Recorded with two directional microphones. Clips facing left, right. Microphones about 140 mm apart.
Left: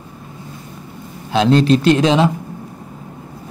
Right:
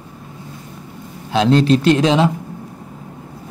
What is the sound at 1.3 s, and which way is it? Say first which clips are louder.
A man's voice: left 1 dB; 20° left (ahead or behind).